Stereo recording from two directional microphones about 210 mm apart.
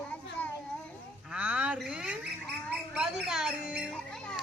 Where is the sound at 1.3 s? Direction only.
5° right (ahead or behind).